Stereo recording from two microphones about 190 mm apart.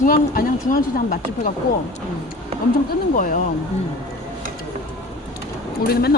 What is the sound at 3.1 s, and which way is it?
Speech, 45° left (ahead or behind).